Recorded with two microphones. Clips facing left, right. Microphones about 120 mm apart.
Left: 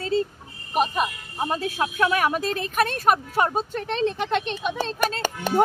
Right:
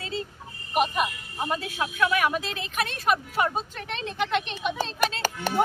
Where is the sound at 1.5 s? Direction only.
40° left (ahead or behind).